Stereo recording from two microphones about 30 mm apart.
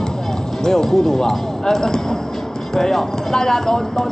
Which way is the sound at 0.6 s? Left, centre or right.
Centre.